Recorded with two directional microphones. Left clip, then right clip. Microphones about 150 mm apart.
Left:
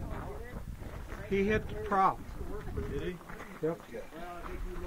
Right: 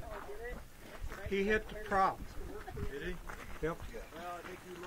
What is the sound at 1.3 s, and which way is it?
Speech, 10° right (ahead or behind).